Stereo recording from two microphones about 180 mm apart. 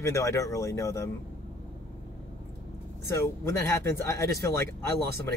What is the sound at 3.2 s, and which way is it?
A man's voice, 15° left (ahead or behind).